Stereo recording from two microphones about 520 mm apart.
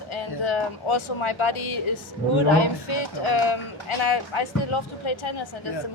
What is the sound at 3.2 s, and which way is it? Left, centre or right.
Speech, left.